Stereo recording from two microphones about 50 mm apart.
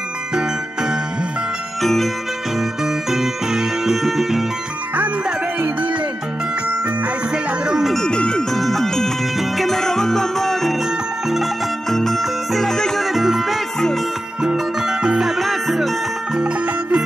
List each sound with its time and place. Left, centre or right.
0.3 s music: centre
1.8 s music: centre
2.8 s music: centre
7.6 s music: centre
8.1 s music: centre
8.5 s music: centre
11.9 s music: centre
13.0 s music: centre
16.3 s music: centre